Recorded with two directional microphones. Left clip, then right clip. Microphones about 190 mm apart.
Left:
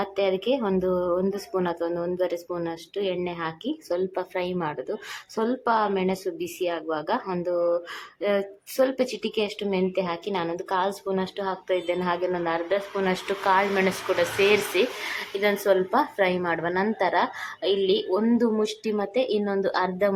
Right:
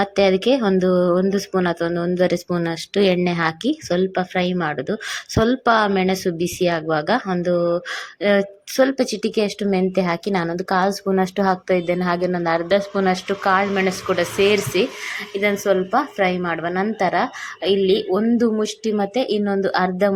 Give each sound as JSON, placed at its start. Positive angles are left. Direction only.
{"t": 0.0, "sound": "a woman's voice", "side_deg": -20}
{"t": 13.2, "sound": "a woman's voice", "side_deg": -15}